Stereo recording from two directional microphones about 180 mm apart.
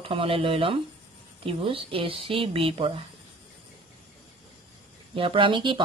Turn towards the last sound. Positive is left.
turn(degrees=-25)  # may be behind; listen again after turning